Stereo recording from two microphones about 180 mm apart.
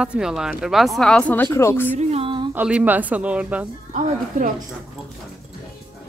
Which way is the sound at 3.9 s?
45° right (ahead or behind).